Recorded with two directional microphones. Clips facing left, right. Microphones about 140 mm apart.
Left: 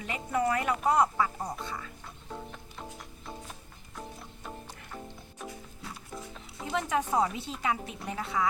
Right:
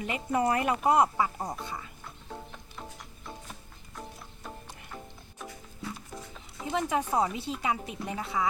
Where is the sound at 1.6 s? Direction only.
15° right (ahead or behind).